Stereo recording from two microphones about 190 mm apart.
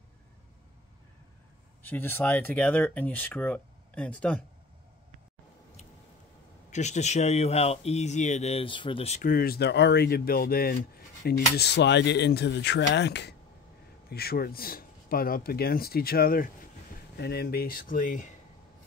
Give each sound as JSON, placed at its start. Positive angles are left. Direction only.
{"t": 1.8, "sound": "speech", "side_deg": 10}
{"t": 6.7, "sound": "speech", "side_deg": 40}
{"t": 9.3, "sound": "speech", "side_deg": 50}